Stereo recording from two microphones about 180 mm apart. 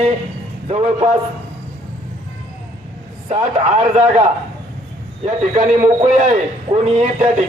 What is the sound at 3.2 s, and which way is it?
A man's voice, 40° right (ahead or behind).